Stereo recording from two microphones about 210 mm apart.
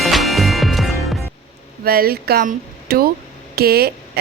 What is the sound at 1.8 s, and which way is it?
A woman's voice, 45° right (ahead or behind).